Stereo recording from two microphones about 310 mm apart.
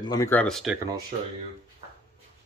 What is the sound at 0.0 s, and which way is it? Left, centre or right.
Speech, centre.